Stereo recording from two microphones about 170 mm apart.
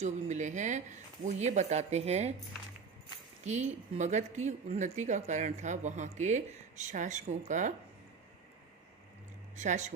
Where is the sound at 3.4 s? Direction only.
40° right (ahead or behind).